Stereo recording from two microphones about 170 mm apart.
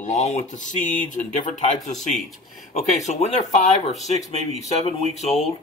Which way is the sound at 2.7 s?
40° left (ahead or behind).